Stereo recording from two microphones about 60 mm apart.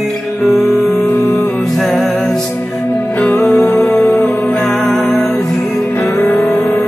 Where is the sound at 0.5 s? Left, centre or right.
Centre.